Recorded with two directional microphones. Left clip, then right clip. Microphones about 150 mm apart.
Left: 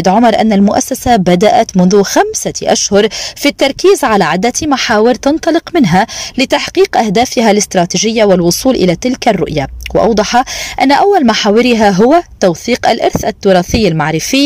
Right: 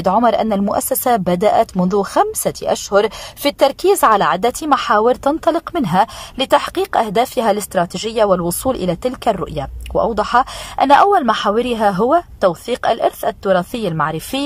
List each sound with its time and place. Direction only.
0.0 s speech: 15° left (ahead or behind)